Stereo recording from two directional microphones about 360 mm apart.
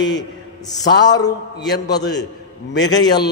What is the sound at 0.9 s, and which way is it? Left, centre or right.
A man's voice, centre.